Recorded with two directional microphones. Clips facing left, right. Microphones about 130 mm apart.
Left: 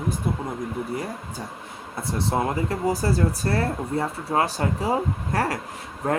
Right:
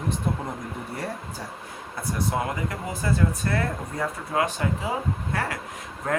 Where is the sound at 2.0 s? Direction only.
25° left (ahead or behind).